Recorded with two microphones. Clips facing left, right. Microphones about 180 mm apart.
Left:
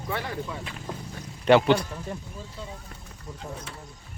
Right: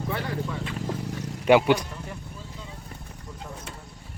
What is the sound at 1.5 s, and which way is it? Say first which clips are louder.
Speech: even; 10° right (ahead or behind).